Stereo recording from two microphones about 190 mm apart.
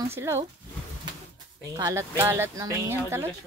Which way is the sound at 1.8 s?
15° right (ahead or behind).